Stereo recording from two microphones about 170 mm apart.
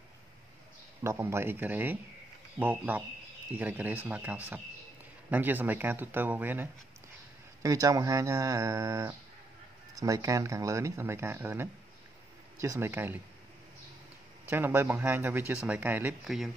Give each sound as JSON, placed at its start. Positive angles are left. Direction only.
{"t": 1.0, "sound": "speech", "side_deg": -15}
{"t": 14.5, "sound": "speech", "side_deg": -15}